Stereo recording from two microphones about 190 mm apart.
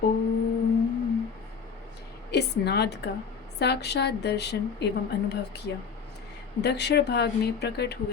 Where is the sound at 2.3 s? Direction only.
60° left (ahead or behind).